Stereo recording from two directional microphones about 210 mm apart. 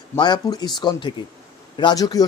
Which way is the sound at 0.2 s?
20° left (ahead or behind).